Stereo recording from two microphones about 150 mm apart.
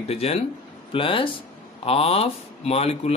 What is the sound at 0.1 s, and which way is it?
Speech, 45° left (ahead or behind).